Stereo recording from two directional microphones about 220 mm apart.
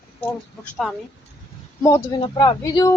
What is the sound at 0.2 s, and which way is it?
Speech, 10° left (ahead or behind).